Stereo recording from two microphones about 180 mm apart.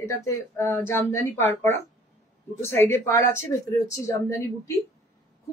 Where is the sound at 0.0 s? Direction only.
15° left (ahead or behind).